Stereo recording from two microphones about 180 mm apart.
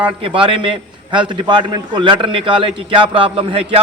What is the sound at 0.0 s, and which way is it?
A man's voice, 30° right (ahead or behind).